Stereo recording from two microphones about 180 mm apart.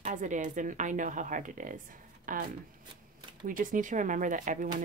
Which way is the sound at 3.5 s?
50° right (ahead or behind).